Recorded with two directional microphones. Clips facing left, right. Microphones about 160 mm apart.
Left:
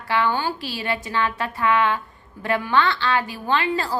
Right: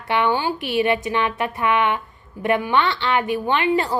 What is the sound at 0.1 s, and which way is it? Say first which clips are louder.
A woman's voice: right 2 dB; 20° right (ahead or behind).